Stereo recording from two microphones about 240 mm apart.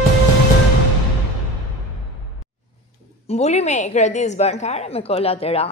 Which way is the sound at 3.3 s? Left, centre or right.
Left.